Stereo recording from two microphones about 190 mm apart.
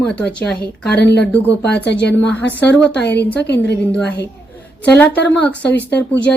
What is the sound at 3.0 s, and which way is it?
Speech, 10° left (ahead or behind).